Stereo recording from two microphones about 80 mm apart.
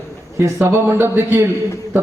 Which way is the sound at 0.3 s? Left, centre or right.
Right.